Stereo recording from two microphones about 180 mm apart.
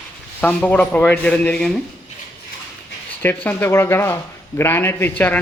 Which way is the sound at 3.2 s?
10° left (ahead or behind).